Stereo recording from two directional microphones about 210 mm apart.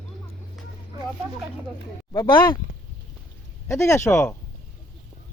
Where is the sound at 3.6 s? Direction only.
15° left (ahead or behind).